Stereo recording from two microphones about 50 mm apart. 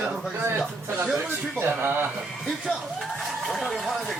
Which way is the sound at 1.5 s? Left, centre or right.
Right.